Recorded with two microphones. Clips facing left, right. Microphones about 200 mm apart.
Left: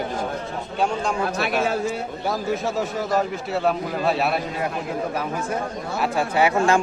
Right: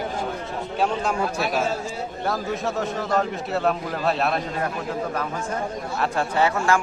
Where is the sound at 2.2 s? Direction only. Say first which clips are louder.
Left 1 dB; centre (ahead or behind).